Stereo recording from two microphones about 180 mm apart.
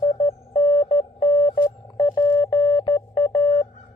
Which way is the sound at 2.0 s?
20° left (ahead or behind).